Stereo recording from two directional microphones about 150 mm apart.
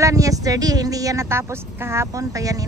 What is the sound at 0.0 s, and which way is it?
A woman's voice, 20° right (ahead or behind).